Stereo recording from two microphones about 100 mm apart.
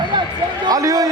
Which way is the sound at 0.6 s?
40° right (ahead or behind).